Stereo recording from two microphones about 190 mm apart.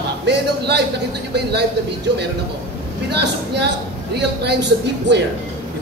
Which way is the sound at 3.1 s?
60° right (ahead or behind).